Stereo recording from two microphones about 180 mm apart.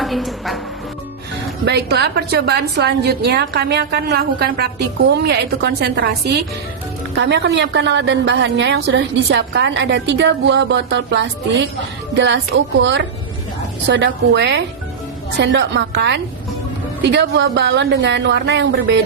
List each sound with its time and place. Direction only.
0.0 s a woman's voice: centre (ahead or behind)
1.6 s a woman's voice: 70° right (ahead or behind)